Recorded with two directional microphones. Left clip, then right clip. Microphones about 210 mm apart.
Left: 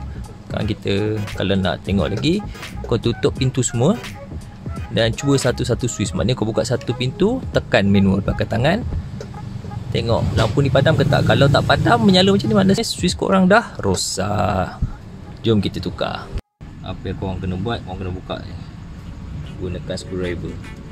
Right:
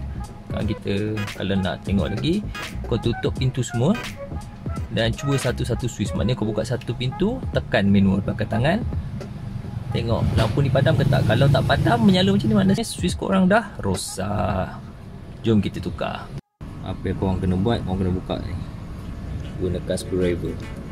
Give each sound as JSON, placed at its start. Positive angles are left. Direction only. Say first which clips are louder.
{"t": 0.6, "sound": "speech", "louder": "left 5 dB", "side_deg": 25}
{"t": 4.9, "sound": "speech", "louder": "left 6 dB", "side_deg": 20}
{"t": 9.9, "sound": "speech", "louder": "left 5 dB", "side_deg": 25}
{"t": 16.8, "sound": "speech", "louder": "right 1 dB", "side_deg": -10}
{"t": 19.9, "sound": "speech", "louder": "right 2 dB", "side_deg": -5}